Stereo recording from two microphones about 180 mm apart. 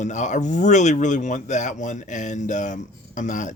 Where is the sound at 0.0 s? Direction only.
40° left (ahead or behind).